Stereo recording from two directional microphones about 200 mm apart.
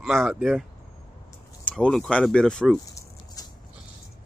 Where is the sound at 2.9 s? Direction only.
15° left (ahead or behind).